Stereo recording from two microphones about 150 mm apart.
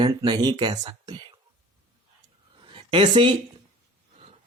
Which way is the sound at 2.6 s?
35° right (ahead or behind).